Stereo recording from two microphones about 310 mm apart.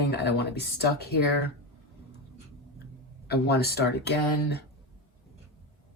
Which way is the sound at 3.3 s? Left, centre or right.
Left.